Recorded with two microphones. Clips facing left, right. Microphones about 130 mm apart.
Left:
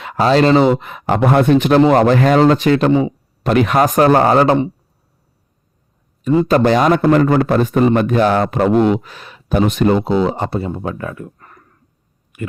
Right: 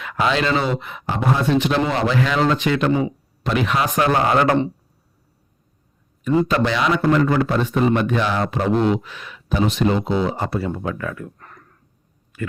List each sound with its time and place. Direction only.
0.0 s speech: 35° left (ahead or behind)
0.6 s a man's voice: 45° left (ahead or behind)
1.0 s a man's voice: 65° left (ahead or behind); by 2.9 s 40° left (ahead or behind)
3.4 s speech: 50° left (ahead or behind)
4.4 s speech: 15° left (ahead or behind)
6.5 s a man's voice: 45° left (ahead or behind)
9.0 s speech: 35° left (ahead or behind)
9.6 s a man's voice: 50° left (ahead or behind)
10.0 s speech: 35° left (ahead or behind)
11.3 s a sound: 5° left (ahead or behind)
12.3 s speech: 15° left (ahead or behind)